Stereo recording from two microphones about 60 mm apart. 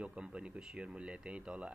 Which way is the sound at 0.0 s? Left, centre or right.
Centre.